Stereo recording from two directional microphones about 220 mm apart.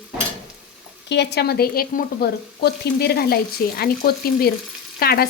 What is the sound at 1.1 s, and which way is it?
A woman's voice, 50° left (ahead or behind).